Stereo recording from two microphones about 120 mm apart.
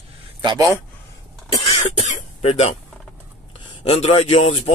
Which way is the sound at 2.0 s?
55° left (ahead or behind).